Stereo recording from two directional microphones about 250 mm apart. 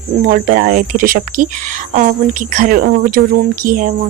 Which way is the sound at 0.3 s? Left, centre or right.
Right.